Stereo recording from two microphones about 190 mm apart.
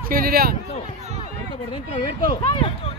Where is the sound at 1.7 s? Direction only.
25° left (ahead or behind).